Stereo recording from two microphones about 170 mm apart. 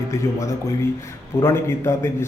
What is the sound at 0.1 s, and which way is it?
A man's voice, 15° left (ahead or behind).